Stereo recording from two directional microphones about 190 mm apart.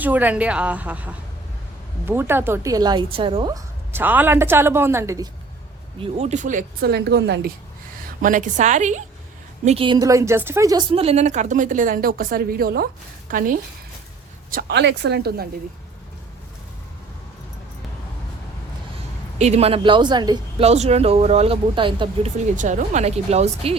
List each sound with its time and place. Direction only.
0.0 s a woman's voice: 10° right (ahead or behind); by 3.6 s 25° right (ahead or behind)
3.9 s a woman's voice: 10° right (ahead or behind)
6.0 s speech: 35° right (ahead or behind)
6.9 s speech: 60° right (ahead or behind)
8.2 s speech: 40° right (ahead or behind)
9.6 s a woman's voice: 25° right (ahead or behind)
10.9 s speech: 35° right (ahead or behind)
14.5 s speech: 60° right (ahead or behind)
19.4 s speech: 35° right (ahead or behind)
20.7 s speech: 35° right (ahead or behind)
22.5 s speech: 40° right (ahead or behind)